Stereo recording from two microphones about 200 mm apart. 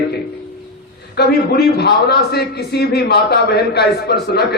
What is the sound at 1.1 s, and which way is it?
A man's voice, 55° left (ahead or behind).